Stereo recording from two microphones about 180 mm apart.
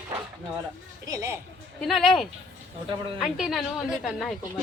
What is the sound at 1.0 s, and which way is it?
Speech, 20° right (ahead or behind).